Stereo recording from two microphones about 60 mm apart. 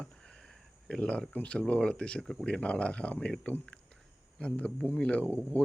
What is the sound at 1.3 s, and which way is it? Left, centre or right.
Speech, left.